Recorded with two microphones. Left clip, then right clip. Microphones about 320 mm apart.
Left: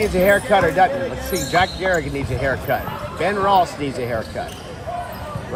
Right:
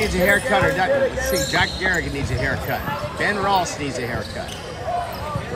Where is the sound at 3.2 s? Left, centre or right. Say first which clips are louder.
Left 4 dB; centre.